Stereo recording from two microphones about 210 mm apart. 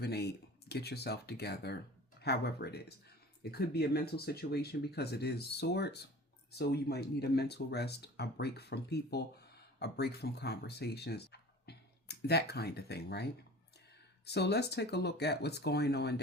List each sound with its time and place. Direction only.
0.0 s speech: 50° left (ahead or behind)
14.3 s speech: 50° left (ahead or behind)